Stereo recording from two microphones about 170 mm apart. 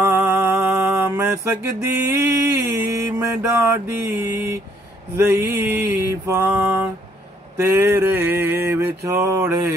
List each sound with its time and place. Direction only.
0.0 s mantra: 15° right (ahead or behind)
7.7 s mantra: 15° right (ahead or behind)